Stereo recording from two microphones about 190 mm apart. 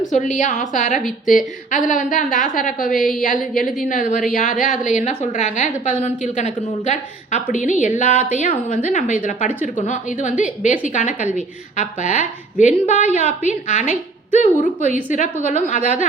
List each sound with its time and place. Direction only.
0.0 s a woman's voice: 40° left (ahead or behind)